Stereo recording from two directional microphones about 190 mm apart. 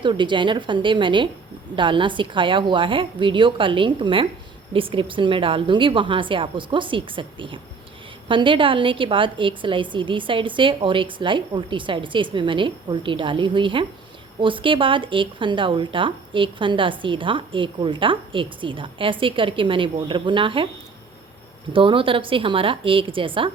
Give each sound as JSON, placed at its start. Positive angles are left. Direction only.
{"t": 0.0, "sound": "speech", "side_deg": -25}
{"t": 21.7, "sound": "speech", "side_deg": -25}